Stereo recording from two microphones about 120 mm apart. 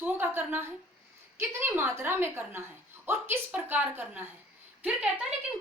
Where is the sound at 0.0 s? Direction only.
20° right (ahead or behind).